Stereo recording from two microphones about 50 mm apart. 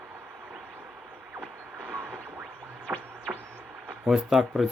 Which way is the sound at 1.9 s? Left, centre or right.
Right.